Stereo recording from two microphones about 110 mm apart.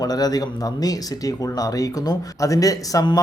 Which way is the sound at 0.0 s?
35° left (ahead or behind).